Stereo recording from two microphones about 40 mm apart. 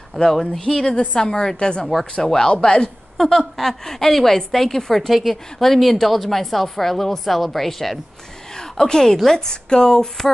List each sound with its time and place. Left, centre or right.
0.2 s a woman's voice: centre
1.1 s a woman's voice: left
3.2 s a woman's voice: centre
8.5 s a woman's voice: centre